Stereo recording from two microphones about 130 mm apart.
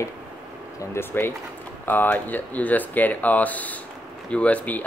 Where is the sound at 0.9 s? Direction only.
15° left (ahead or behind).